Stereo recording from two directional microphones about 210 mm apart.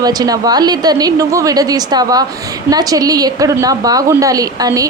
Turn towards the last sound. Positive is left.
turn(degrees=-15)  # may be behind; listen again after turning